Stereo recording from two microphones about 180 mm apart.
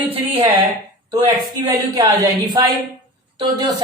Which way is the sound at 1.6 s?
20° right (ahead or behind).